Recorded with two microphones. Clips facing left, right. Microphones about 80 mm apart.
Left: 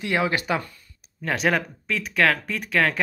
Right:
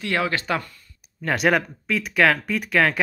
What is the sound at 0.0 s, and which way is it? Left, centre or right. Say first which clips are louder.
Speech: even; centre.